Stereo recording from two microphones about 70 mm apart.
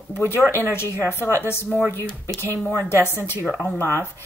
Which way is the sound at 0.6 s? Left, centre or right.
Left.